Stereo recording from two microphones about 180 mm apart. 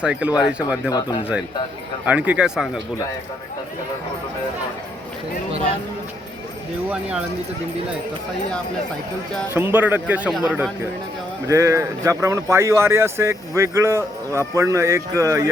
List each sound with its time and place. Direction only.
0.0 s speech: 5° right (ahead or behind)
0.9 s speech: 25° left (ahead or behind)
2.0 s speech: 10° right (ahead or behind)
6.9 s speech: 5° right (ahead or behind)
9.5 s speech: 10° right (ahead or behind)
11.4 s speech: 15° right (ahead or behind)